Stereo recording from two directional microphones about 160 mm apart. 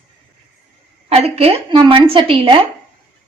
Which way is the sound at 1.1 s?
40° right (ahead or behind).